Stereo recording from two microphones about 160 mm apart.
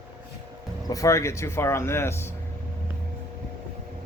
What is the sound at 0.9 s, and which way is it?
Speech, 20° left (ahead or behind).